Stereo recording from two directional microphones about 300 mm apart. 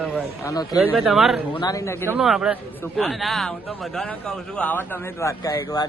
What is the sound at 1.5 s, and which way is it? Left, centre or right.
Speech, centre.